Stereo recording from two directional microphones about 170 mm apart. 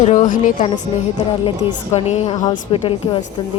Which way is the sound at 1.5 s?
35° left (ahead or behind).